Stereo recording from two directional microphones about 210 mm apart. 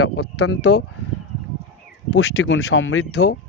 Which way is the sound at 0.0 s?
90° left.